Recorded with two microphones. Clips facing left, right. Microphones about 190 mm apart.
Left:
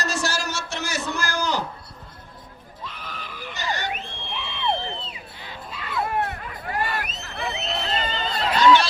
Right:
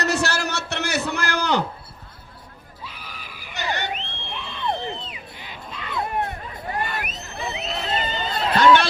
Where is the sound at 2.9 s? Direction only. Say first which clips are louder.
Left 4 dB; 10° right (ahead or behind).